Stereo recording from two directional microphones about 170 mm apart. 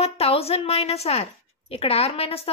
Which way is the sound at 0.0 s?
35° left (ahead or behind).